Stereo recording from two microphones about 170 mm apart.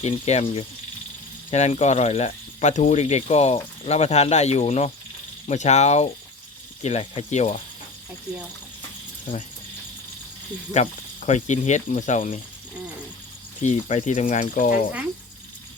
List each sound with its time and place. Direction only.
0.0 s speech: 40° left (ahead or behind)
10.7 s speech: 45° left (ahead or behind)
13.6 s speech: 45° left (ahead or behind)